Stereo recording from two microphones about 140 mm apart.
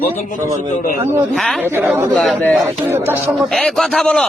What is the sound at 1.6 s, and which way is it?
Speech, 15° right (ahead or behind).